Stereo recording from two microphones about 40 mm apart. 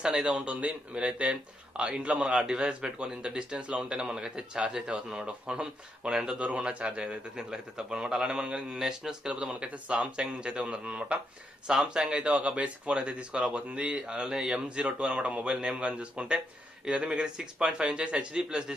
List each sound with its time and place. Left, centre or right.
0.0 s a man's voice: centre
0.3 s a man's voice: right
4.1 s a man's voice: right
6.5 s a man's voice: right
7.3 s a man's voice: centre
9.3 s a man's voice: right
11.6 s a man's voice: centre
12.2 s a man's voice: right
14.8 s a man's voice: right